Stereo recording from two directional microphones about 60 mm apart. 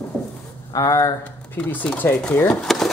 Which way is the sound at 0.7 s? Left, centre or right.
Left.